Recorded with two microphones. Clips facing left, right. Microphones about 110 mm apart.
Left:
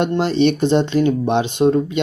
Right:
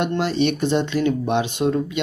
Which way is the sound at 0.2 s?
30° left (ahead or behind).